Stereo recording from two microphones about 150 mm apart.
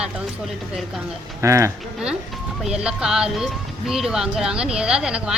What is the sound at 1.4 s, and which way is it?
Speech, 20° right (ahead or behind).